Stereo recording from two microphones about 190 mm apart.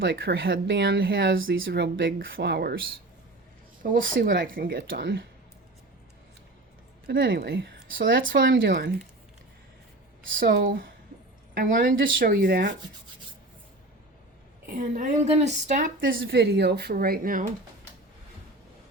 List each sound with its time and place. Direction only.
0.0 s speech: 55° right (ahead or behind)
1.5 s speech: 75° right (ahead or behind); by 2.8 s 55° right (ahead or behind)
3.8 s speech: 45° right (ahead or behind)
7.1 s speech: 55° right (ahead or behind)
10.4 s speech: 50° right (ahead or behind)
14.8 s a woman's voice: 40° right (ahead or behind)
16.0 s speech: 75° right (ahead or behind); by 17.4 s 50° right (ahead or behind)